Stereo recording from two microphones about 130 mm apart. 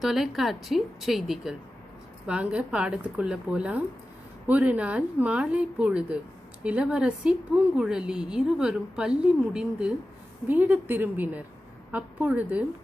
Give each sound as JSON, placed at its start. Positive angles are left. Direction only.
{"t": 0.0, "sound": "a woman's voice", "side_deg": 0}